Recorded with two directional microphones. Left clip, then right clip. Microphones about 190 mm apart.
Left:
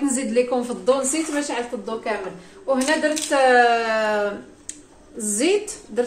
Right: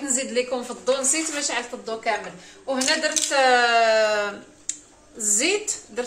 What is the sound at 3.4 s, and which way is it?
A woman's voice, 25° left (ahead or behind).